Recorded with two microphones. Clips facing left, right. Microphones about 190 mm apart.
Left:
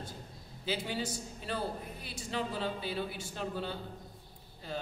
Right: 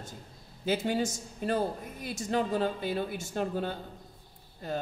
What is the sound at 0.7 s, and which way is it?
A man's voice, 50° right (ahead or behind).